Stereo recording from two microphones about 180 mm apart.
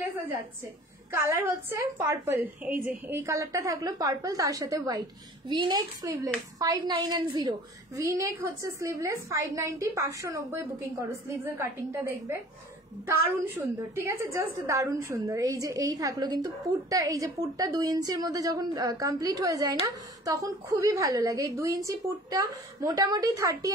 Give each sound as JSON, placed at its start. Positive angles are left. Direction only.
{"t": 1.1, "sound": "a woman's voice", "side_deg": -15}